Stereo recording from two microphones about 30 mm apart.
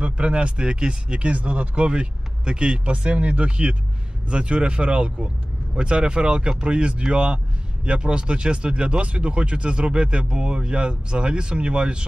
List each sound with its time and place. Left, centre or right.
0.0 s speech: right